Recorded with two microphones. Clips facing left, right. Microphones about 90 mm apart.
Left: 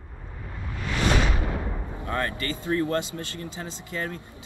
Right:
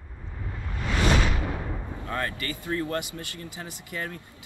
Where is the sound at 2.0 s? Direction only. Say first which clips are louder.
Left 3 dB; 30° left (ahead or behind).